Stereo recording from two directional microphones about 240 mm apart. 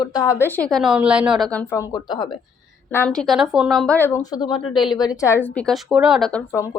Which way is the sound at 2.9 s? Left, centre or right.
Centre.